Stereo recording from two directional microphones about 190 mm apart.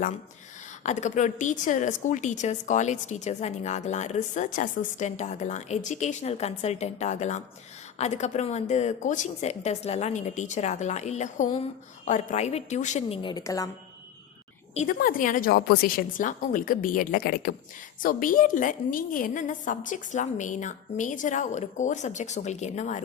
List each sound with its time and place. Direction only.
0.9 s a woman's voice: 40° left (ahead or behind)
13.3 s a woman's voice: 15° left (ahead or behind)
14.8 s a woman's voice: 50° left (ahead or behind)